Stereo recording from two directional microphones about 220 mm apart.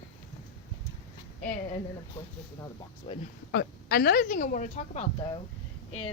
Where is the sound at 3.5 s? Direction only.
45° left (ahead or behind); by 5.3 s 30° left (ahead or behind).